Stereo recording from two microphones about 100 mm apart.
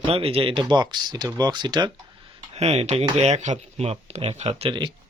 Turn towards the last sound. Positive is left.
turn(degrees=-90)